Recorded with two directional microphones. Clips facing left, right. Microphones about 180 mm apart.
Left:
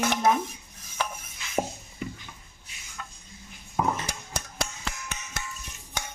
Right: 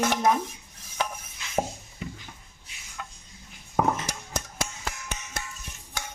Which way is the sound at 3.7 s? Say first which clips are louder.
Right 2 dB; 45° right (ahead or behind).